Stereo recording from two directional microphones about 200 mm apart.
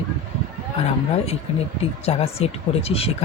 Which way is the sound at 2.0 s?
30° left (ahead or behind).